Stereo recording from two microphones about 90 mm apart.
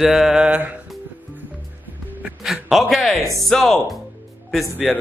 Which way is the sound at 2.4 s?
Centre (ahead or behind).